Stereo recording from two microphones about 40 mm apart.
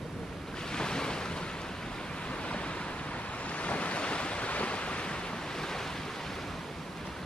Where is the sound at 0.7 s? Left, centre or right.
Centre.